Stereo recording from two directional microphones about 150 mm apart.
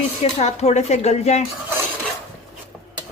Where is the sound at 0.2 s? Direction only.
45° left (ahead or behind).